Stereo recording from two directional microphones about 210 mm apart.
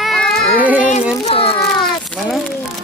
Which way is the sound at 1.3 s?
25° left (ahead or behind).